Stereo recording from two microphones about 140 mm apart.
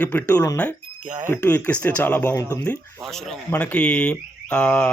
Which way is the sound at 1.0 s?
65° right (ahead or behind).